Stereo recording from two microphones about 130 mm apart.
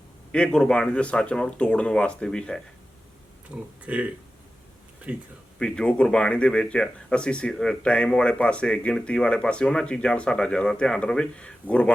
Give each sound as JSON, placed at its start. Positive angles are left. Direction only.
{"t": 0.3, "sound": "speech", "side_deg": 5}
{"t": 3.5, "sound": "speech", "side_deg": -10}
{"t": 5.5, "sound": "speech", "side_deg": 5}